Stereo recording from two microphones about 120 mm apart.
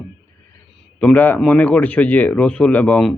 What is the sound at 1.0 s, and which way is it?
Speech, 15° left (ahead or behind).